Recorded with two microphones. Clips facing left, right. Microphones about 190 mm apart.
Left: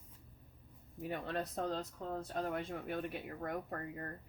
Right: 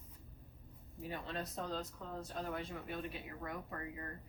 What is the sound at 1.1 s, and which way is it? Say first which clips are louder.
A woman's voice: left 4 dB; 60° left (ahead or behind).